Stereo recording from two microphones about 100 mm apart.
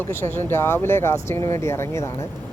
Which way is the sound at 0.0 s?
20° left (ahead or behind).